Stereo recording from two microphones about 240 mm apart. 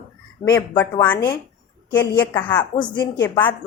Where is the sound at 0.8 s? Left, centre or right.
Centre.